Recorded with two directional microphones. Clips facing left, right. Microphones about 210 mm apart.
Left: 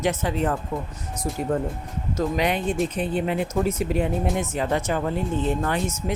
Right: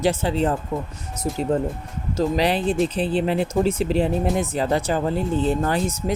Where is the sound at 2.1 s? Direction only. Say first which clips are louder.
Right 3 dB; 35° right (ahead or behind).